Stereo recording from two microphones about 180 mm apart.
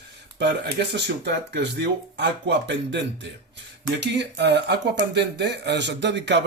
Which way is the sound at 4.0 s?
70° right (ahead or behind).